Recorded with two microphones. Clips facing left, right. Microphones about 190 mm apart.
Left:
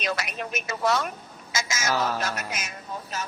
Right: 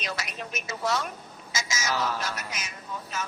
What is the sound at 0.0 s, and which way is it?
A woman's voice, 60° left (ahead or behind).